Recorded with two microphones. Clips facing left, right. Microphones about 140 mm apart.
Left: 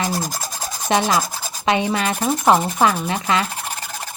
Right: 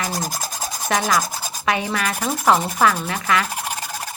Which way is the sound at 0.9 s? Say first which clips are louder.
Left 2 dB; 25° left (ahead or behind).